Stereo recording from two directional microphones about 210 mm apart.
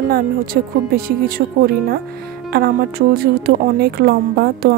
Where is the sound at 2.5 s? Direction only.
45° right (ahead or behind).